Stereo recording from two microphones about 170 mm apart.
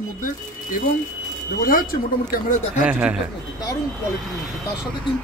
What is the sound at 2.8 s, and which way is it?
Speech, 5° right (ahead or behind).